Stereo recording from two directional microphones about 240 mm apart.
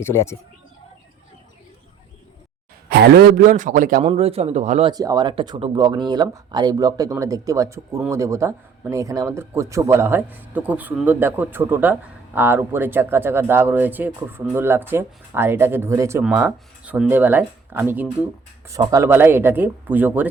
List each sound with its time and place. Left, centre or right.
0.0 s speech: centre
2.9 s a man's voice: right
4.9 s a man's voice: centre